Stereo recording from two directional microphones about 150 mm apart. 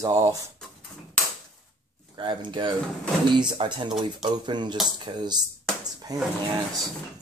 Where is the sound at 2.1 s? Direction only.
30° right (ahead or behind).